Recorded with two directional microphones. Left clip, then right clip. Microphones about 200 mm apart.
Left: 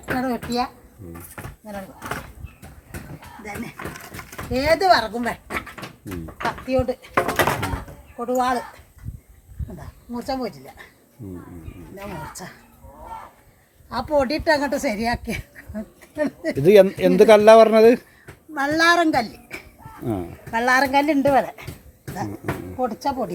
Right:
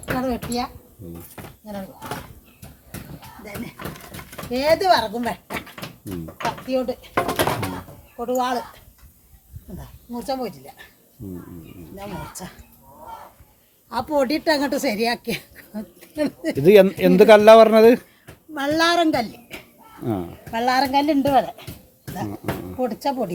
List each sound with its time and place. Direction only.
0.2 s speech: 15° right (ahead or behind)
1.4 s speech: 5° left (ahead or behind)
3.4 s speech: centre (ahead or behind)
4.5 s speech: 10° right (ahead or behind)
7.1 s a sound: 10° left (ahead or behind)
8.1 s speech: 5° right (ahead or behind)
10.2 s speech: 25° right (ahead or behind)
12.3 s speech: 20° right (ahead or behind)
13.9 s a woman's voice: 45° right (ahead or behind)
16.6 s a child's voice: 5° right (ahead or behind)